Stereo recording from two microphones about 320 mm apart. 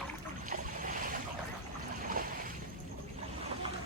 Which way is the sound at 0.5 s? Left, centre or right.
Right.